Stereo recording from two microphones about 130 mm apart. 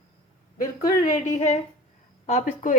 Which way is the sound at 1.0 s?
65° left (ahead or behind).